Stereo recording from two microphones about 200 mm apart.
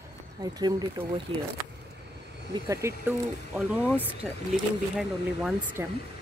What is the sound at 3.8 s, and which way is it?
Speech, 10° left (ahead or behind).